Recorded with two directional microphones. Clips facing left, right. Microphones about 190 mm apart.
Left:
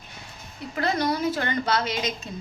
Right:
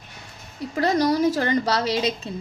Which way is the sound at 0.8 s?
40° right (ahead or behind).